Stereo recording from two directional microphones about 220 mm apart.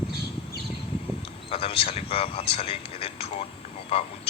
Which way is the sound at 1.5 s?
25° left (ahead or behind).